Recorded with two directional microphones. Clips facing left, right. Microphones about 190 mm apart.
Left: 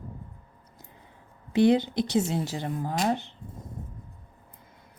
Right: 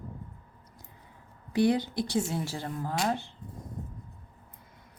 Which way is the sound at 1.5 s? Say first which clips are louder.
Left 4 dB; 25° left (ahead or behind).